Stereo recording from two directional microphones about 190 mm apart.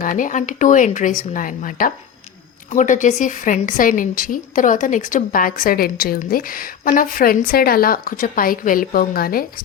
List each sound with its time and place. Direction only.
0.0 s speech: 45° left (ahead or behind)